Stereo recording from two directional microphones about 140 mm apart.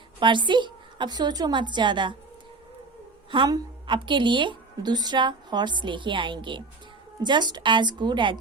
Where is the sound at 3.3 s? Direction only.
35° right (ahead or behind).